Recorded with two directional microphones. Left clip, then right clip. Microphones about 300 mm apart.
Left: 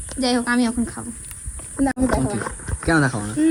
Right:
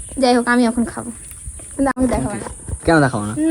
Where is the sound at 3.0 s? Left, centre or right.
Right.